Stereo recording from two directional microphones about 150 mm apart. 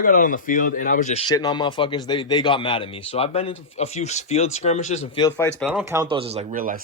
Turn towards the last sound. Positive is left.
turn(degrees=-65)  # may be behind; listen again after turning